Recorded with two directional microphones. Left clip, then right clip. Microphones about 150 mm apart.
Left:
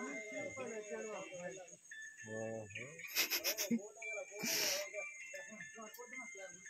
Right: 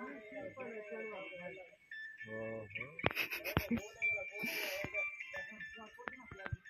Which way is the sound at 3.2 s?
10° left (ahead or behind).